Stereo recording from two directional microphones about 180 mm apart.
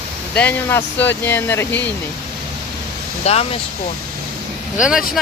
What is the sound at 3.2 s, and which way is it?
Speech, 35° left (ahead or behind).